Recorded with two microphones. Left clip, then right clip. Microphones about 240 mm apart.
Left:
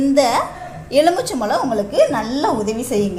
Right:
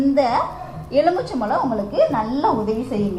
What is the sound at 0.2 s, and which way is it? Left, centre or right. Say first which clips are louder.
A woman's voice: left 3 dB; left.